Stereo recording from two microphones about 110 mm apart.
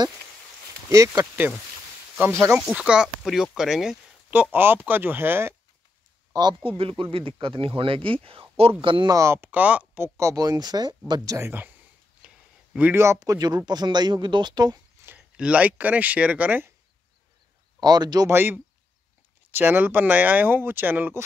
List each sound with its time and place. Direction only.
0.8 s speech: 30° right (ahead or behind)
2.7 s speech: 10° right (ahead or behind)
4.3 s speech: 15° right (ahead or behind)
6.3 s speech: 40° right (ahead or behind)
6.8 s speech: 55° right (ahead or behind)
8.8 s speech: 50° right (ahead or behind)
9.1 s speech: 25° right (ahead or behind)
11.4 s speech: 20° right (ahead or behind)
12.2 s a sound: 10° right (ahead or behind)
12.7 s speech: 15° right (ahead or behind)
13.0 s speech: 30° right (ahead or behind)
15.1 s speech: 10° right (ahead or behind)
17.7 s speech: 40° right (ahead or behind)
18.3 s speech: 20° right (ahead or behind)